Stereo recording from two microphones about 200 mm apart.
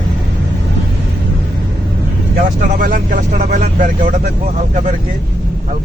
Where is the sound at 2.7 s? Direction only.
45° right (ahead or behind).